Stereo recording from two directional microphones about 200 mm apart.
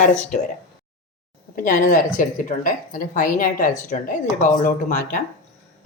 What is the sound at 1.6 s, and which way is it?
A woman's voice, 40° left (ahead or behind).